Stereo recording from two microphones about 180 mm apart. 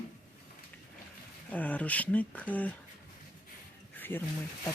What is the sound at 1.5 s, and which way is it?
Speech, 10° left (ahead or behind).